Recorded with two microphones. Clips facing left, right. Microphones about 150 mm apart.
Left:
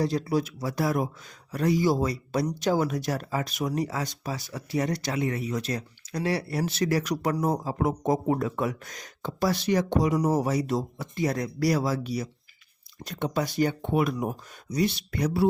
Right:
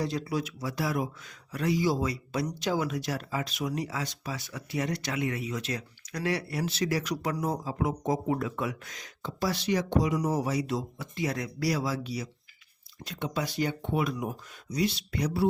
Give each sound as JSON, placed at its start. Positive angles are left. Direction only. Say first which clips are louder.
{"t": 0.0, "sound": "speech", "louder": "left 5 dB", "side_deg": 40}
{"t": 6.7, "sound": "speech", "louder": "left 3 dB", "side_deg": 50}
{"t": 8.3, "sound": "speech", "louder": "left 4 dB", "side_deg": 40}
{"t": 9.2, "sound": "speech", "louder": "left 4 dB", "side_deg": 50}